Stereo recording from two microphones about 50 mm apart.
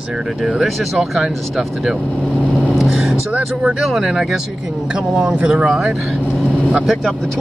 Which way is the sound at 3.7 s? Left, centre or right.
Centre.